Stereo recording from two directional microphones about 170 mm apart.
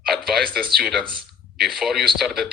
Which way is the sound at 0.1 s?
Centre (ahead or behind).